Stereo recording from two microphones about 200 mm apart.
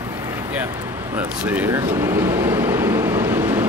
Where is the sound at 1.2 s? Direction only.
10° right (ahead or behind).